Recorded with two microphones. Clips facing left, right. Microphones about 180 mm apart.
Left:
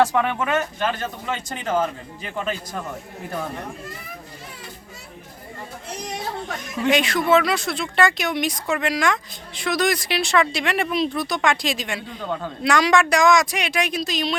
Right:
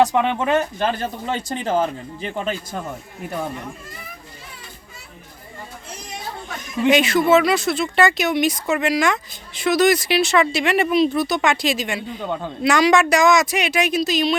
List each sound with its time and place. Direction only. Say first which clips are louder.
0.0 s speech: right 2 dB; 20° right (ahead or behind)
6.9 s speech: right 3 dB; 5° right (ahead or behind)
12.2 s a man's voice: even; 15° right (ahead or behind)
12.6 s speech: right 3 dB; 5° right (ahead or behind)